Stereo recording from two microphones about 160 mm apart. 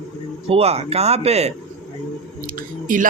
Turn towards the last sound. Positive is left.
turn(degrees=-55)  # may be behind; listen again after turning